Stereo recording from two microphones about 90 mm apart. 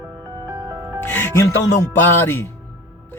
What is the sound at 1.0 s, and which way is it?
Speech, 25° left (ahead or behind).